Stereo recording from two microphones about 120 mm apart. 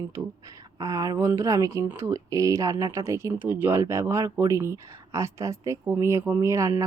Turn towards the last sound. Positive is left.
turn(degrees=-25)  # may be behind; listen again after turning